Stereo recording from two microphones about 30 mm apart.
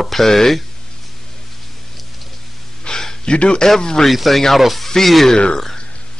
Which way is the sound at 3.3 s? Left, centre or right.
Left.